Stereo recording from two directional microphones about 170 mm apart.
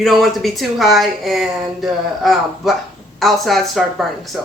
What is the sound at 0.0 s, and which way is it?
Speech, centre (ahead or behind).